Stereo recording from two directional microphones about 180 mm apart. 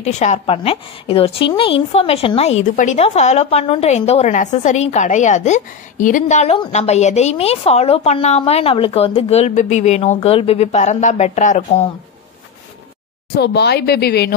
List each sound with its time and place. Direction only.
0.0 s a woman's voice: 40° left (ahead or behind)
13.3 s speech: 65° left (ahead or behind)